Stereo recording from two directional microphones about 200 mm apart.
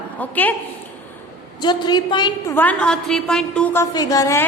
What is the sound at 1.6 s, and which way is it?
Speech, 20° left (ahead or behind).